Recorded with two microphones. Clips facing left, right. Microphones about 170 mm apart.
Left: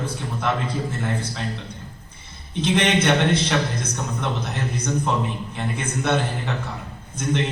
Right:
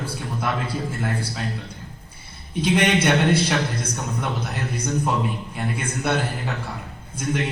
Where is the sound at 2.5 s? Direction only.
10° right (ahead or behind).